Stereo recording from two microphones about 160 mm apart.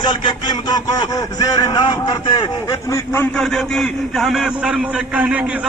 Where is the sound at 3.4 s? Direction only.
5° left (ahead or behind).